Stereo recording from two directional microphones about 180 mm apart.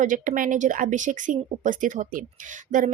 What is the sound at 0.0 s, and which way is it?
Speech, 50° right (ahead or behind).